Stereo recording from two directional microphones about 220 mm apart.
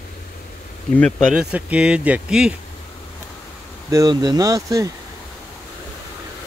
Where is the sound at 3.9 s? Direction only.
15° right (ahead or behind).